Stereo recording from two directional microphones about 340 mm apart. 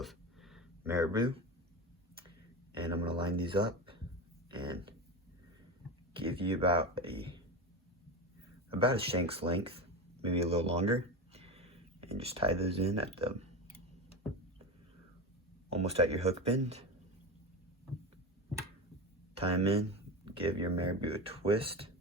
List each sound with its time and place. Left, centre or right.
0.0 s a sound: centre
2.7 s speech: centre
6.1 s speech: centre
8.7 s speech: centre
15.7 s speech: centre
19.3 s speech: centre